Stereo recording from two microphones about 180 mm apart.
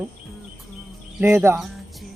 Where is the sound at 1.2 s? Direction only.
15° right (ahead or behind).